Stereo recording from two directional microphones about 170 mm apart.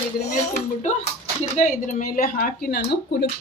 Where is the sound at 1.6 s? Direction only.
50° left (ahead or behind); by 2.9 s 65° left (ahead or behind).